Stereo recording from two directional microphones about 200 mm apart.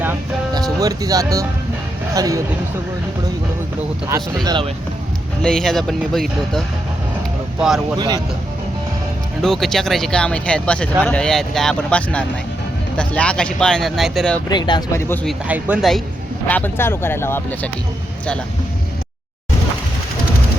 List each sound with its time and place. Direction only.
0.0 s music: 10° right (ahead or behind)
0.8 s speech: 15° right (ahead or behind)
4.4 s speech: 25° right (ahead or behind)
5.4 s speech: 5° left (ahead or behind)
7.9 s speech: 20° right (ahead or behind)
9.4 s speech: centre (ahead or behind)
14.5 s speech: 20° left (ahead or behind)
15.4 s speech: 5° right (ahead or behind)
16.5 s speech: 10° left (ahead or behind)